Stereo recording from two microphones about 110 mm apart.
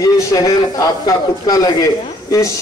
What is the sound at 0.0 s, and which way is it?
A man's voice, 30° left (ahead or behind).